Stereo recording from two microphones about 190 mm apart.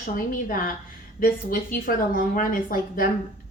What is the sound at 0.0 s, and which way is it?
Speech, 45° left (ahead or behind).